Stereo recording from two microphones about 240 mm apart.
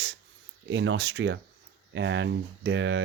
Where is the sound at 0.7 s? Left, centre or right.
Right.